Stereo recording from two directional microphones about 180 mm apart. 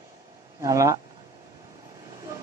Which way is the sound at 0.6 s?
20° right (ahead or behind).